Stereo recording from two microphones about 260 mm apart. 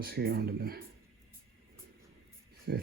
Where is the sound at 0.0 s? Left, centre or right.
Right.